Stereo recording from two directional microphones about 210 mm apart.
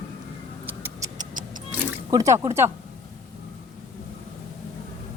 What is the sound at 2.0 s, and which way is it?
Speech, 15° right (ahead or behind).